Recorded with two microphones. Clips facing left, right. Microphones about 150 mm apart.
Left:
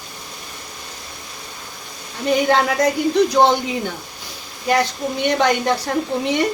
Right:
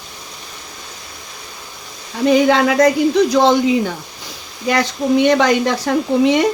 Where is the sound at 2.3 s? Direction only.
90° right.